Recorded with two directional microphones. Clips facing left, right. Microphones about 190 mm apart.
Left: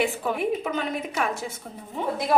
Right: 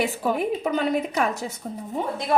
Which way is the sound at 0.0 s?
40° right (ahead or behind).